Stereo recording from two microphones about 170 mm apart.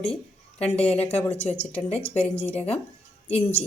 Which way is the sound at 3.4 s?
40° left (ahead or behind).